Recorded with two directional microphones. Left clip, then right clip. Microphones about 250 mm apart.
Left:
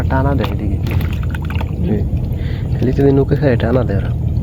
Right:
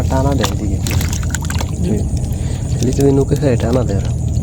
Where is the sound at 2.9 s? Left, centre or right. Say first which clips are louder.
Left 1 dB; centre.